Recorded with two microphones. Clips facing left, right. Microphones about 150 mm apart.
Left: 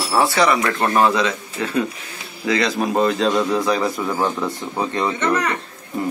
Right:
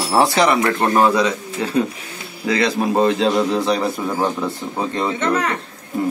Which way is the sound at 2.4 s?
30° right (ahead or behind).